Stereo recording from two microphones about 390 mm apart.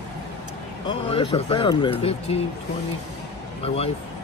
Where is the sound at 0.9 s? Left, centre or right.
Centre.